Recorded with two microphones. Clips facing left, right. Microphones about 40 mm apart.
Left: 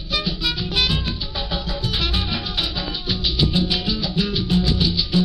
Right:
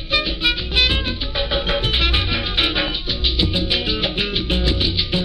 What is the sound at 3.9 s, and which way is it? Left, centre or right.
Music, right.